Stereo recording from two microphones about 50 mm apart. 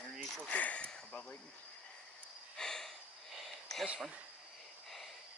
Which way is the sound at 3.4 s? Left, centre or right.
Centre.